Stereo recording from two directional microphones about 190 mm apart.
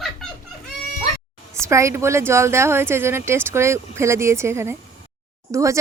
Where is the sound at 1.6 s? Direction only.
15° right (ahead or behind).